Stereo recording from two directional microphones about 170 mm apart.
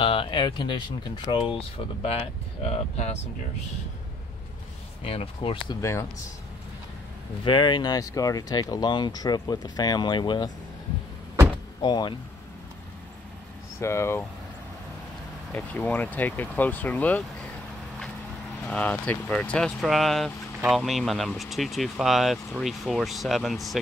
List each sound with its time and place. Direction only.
0.0 s speech: 30° left (ahead or behind)
2.7 s speech: 40° left (ahead or behind)
5.0 s speech: 35° left (ahead or behind)
5.8 s speech: 20° left (ahead or behind)
7.4 s speech: 30° left (ahead or behind)
11.8 s speech: 25° left (ahead or behind)
13.7 s speech: 15° left (ahead or behind)
15.5 s speech: 10° left (ahead or behind)
18.7 s speech: 10° left (ahead or behind)